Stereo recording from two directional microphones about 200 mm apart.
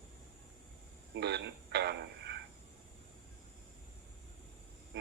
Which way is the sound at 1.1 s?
55° right (ahead or behind).